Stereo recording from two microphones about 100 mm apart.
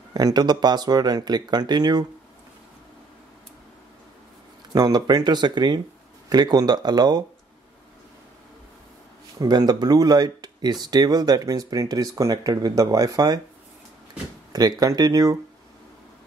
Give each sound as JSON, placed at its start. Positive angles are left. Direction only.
{"t": 0.1, "sound": "speech", "side_deg": -40}
{"t": 4.7, "sound": "speech", "side_deg": -40}
{"t": 9.4, "sound": "speech", "side_deg": -40}
{"t": 14.5, "sound": "speech", "side_deg": -40}